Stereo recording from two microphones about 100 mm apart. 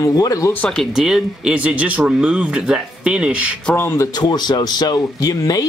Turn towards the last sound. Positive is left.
turn(degrees=35)  # may be behind; listen again after turning